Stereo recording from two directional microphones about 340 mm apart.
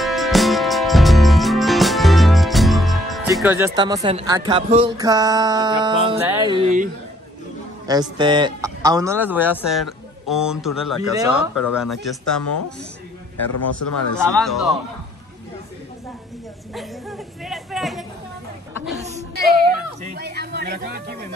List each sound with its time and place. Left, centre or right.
0.0 s music: centre
7.8 s a man's voice: centre
13.5 s speech: left
14.2 s a man's voice: centre
17.5 s a sound: centre
19.0 s a sound: right